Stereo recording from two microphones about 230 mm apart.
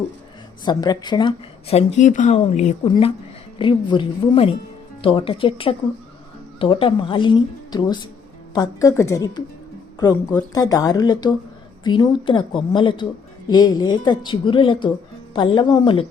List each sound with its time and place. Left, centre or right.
0.6 s speech: centre